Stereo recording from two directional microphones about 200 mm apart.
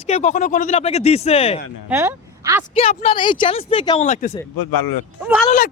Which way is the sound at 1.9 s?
15° right (ahead or behind).